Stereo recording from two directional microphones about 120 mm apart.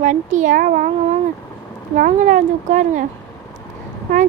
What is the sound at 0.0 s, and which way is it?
A woman's voice, 90° right.